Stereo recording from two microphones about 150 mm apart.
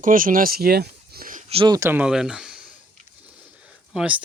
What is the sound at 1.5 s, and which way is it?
Speech, 40° right (ahead or behind).